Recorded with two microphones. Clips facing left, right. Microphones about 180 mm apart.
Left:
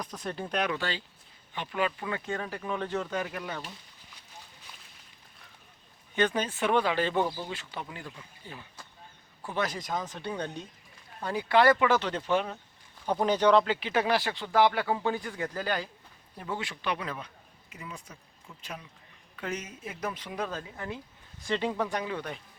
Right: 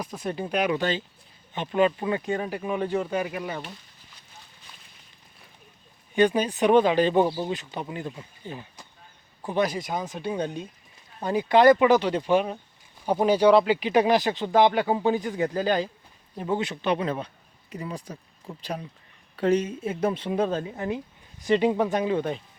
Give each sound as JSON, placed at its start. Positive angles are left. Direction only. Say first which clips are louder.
{"t": 0.0, "sound": "speech", "louder": "right 5 dB", "side_deg": -10}
{"t": 6.1, "sound": "speech", "louder": "right 7 dB", "side_deg": -10}